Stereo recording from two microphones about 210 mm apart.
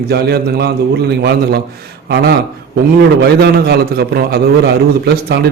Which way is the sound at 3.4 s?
50° right (ahead or behind).